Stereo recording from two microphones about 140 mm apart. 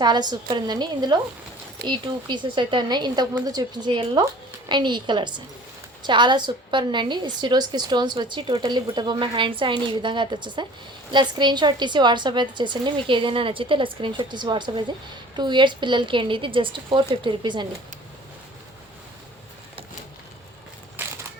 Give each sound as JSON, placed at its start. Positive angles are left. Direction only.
{"t": 0.0, "sound": "a woman's voice", "side_deg": -30}
{"t": 21.0, "sound": "crushing", "side_deg": -15}